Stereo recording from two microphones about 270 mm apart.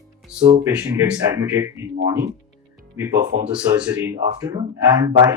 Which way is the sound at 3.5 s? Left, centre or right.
Centre.